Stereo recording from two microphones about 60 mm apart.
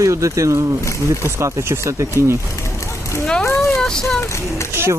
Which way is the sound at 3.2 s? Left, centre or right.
Centre.